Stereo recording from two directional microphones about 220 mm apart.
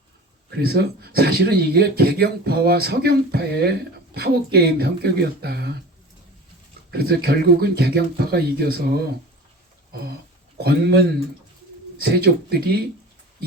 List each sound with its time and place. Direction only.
0.5 s speech: 45° right (ahead or behind)
6.9 s speech: 45° right (ahead or behind)
9.9 s a sound: 45° right (ahead or behind)
10.6 s speech: 45° right (ahead or behind)
11.9 s speech: 45° right (ahead or behind)